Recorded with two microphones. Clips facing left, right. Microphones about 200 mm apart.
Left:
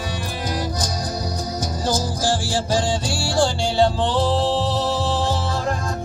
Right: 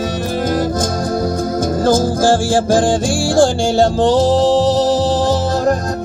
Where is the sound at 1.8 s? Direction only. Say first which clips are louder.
Right 10 dB; 50° right (ahead or behind).